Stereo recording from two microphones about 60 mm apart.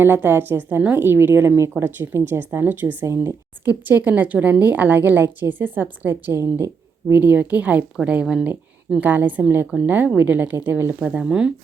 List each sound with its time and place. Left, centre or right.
0.0 s a woman's voice: right
0.8 s speech: right
1.0 s a woman's voice: right
6.3 s a woman's voice: right
7.1 s a woman's voice: right; by 8.4 s centre
9.0 s a woman's voice: right
11.0 s speech: centre